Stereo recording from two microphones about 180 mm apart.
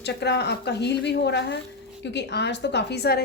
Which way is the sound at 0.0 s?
70° left (ahead or behind).